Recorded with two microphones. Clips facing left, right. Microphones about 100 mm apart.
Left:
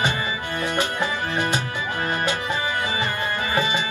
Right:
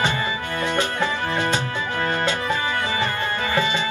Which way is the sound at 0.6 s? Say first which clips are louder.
Right 2 dB; 20° left (ahead or behind).